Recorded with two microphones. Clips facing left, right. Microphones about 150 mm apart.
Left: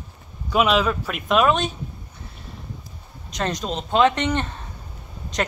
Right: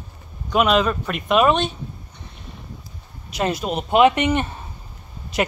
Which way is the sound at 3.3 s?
10° right (ahead or behind).